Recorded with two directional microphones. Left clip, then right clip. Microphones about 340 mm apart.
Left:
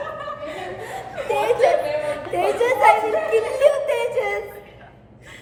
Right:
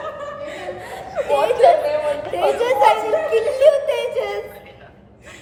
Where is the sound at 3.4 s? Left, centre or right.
Centre.